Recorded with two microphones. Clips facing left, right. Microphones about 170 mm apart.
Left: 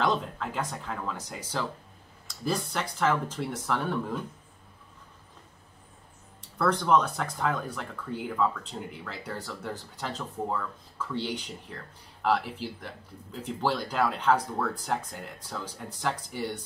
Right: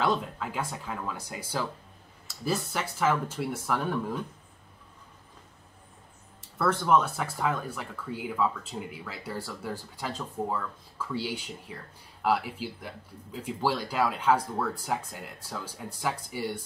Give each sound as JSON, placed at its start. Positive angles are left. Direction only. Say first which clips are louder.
{"t": 0.0, "sound": "speech", "louder": "even", "side_deg": -5}
{"t": 6.6, "sound": "speech", "louder": "even", "side_deg": -5}